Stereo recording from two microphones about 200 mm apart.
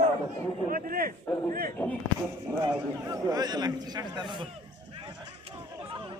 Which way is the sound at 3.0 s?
15° right (ahead or behind).